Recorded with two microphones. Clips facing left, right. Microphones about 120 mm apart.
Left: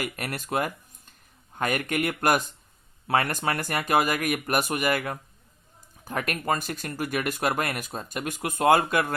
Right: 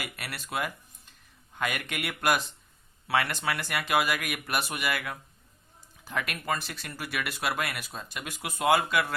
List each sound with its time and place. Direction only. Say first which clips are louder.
0.0 s speech: left 7 dB; 45° left (ahead or behind)